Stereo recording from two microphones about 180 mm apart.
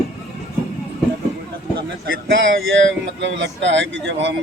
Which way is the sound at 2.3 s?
90° right.